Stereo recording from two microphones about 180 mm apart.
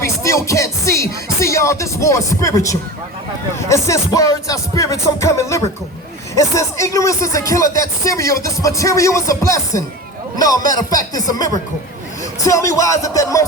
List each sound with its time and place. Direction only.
0.0 s speech: 15° left (ahead or behind)